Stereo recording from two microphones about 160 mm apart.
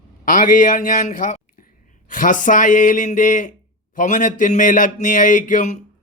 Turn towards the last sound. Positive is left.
turn(degrees=50)  # may be behind; listen again after turning